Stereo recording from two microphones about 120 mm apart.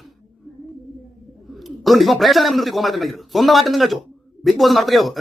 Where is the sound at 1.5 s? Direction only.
Centre (ahead or behind).